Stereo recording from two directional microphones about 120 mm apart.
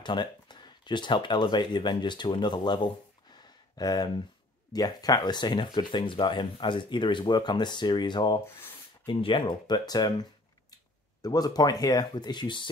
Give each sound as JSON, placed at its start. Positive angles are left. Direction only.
{"t": 0.0, "sound": "speech", "side_deg": 40}
{"t": 11.2, "sound": "speech", "side_deg": 35}